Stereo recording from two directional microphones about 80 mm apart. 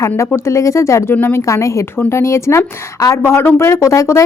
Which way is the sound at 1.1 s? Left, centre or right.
Left.